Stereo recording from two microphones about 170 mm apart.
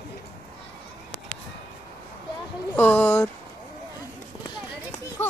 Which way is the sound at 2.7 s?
10° left (ahead or behind).